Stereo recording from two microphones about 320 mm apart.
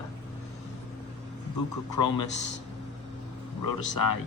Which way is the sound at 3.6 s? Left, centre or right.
Left.